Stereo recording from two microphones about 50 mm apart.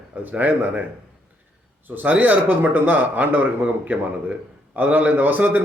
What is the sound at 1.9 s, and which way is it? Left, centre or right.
A man's voice, right.